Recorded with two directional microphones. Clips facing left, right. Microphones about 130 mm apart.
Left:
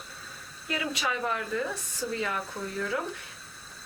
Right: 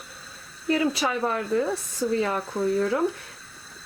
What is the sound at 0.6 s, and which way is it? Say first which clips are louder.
Speech: right 8 dB; 35° right (ahead or behind).